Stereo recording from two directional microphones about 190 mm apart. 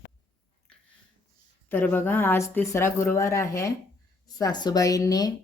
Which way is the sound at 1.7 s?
10° left (ahead or behind).